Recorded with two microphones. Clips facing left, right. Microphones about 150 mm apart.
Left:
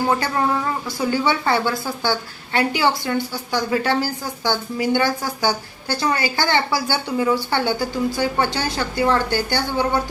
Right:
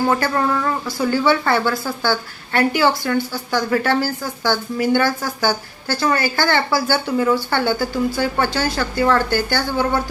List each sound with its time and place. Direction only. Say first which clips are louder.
0.2 s a woman's voice: right 2 dB; 20° left (ahead or behind)